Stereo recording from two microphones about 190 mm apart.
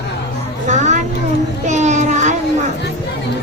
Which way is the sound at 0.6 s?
40° right (ahead or behind).